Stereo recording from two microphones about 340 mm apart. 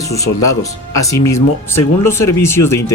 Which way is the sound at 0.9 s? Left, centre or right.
Centre.